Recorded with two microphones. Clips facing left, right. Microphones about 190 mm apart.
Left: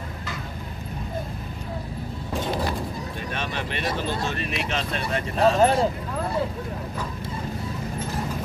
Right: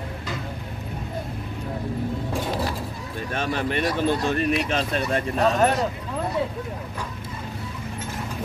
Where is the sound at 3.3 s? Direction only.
45° right (ahead or behind).